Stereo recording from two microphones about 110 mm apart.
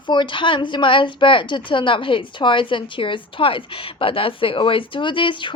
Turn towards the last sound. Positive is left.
turn(degrees=50)  # may be behind; listen again after turning